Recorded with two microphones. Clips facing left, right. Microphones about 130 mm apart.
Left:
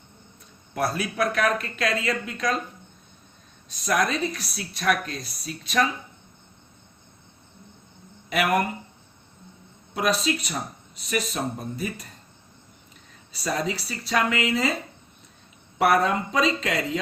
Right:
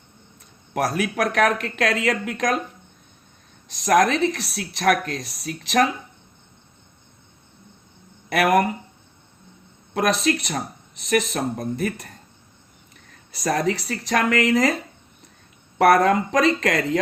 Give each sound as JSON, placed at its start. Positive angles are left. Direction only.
{"t": 0.7, "sound": "a man's voice", "side_deg": -90}
{"t": 1.0, "sound": "speech", "side_deg": -70}
{"t": 3.8, "sound": "a woman's voice", "side_deg": -90}
{"t": 8.3, "sound": "speech", "side_deg": -80}
{"t": 10.1, "sound": "speech", "side_deg": -75}
{"t": 13.4, "sound": "speech", "side_deg": -75}
{"t": 15.8, "sound": "speech", "side_deg": -80}